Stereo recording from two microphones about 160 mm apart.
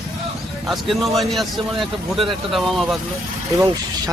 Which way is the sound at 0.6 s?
Centre (ahead or behind).